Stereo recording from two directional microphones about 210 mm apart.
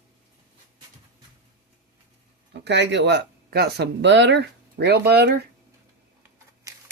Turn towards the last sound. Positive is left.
turn(degrees=-50)  # may be behind; listen again after turning